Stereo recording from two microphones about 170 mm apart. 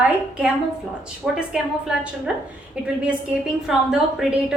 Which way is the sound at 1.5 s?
5° right (ahead or behind).